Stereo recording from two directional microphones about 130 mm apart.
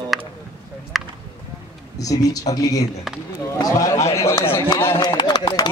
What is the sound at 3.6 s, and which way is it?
Speech, 25° left (ahead or behind).